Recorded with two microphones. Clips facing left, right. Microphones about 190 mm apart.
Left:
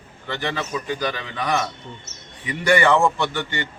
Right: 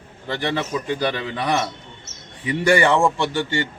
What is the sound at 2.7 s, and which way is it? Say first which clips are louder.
A man's voice: even; 30° right (ahead or behind).